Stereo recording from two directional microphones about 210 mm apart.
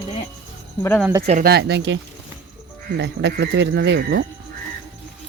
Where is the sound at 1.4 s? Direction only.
50° right (ahead or behind).